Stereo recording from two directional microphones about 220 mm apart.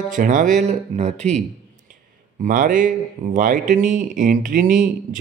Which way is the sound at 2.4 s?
40° right (ahead or behind).